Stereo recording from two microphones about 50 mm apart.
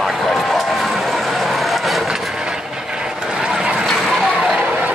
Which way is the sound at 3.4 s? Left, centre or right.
Centre.